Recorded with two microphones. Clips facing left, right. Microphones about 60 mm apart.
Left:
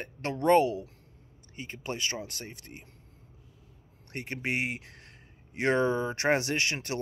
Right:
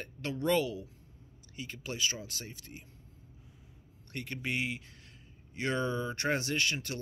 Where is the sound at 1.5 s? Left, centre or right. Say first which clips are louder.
Left 4 dB; left.